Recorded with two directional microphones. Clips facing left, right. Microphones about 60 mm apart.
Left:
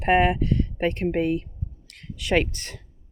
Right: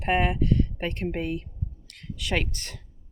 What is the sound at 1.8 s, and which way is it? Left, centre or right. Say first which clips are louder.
Speech: left 4 dB; left.